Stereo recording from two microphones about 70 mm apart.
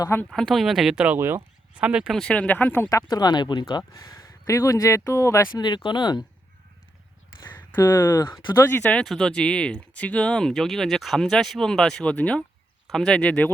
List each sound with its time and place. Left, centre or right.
0.3 s speech: centre
0.9 s speech: right
2.0 s speech: centre
2.3 s speech: left
3.1 s speech: left
3.9 s speech: left
5.5 s speech: left
7.8 s speech: left
8.3 s speech: left
8.7 s speech: left
9.0 s speech: centre
12.1 s speech: centre